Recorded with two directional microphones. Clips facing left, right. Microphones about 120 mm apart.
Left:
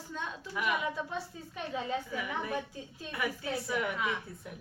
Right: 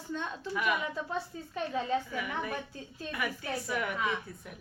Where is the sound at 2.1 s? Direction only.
20° left (ahead or behind).